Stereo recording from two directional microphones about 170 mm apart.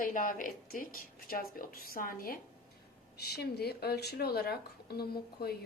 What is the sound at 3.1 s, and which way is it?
Speech, 70° left (ahead or behind).